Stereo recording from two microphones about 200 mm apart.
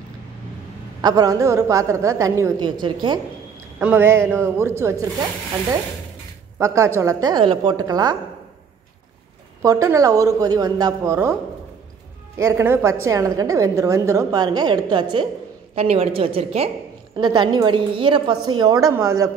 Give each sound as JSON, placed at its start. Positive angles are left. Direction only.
{"t": 1.0, "sound": "a woman's voice", "side_deg": -20}
{"t": 3.8, "sound": "a woman's voice", "side_deg": -10}
{"t": 6.6, "sound": "a woman's voice", "side_deg": -15}
{"t": 9.6, "sound": "a woman's voice", "side_deg": -15}
{"t": 12.4, "sound": "a woman's voice", "side_deg": -15}